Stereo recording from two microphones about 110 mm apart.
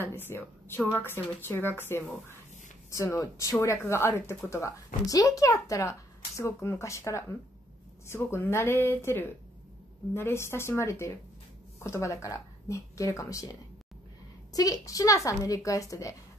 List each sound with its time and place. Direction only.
0.0 s a woman's voice: 20° left (ahead or behind)
14.5 s a woman's voice: 35° left (ahead or behind)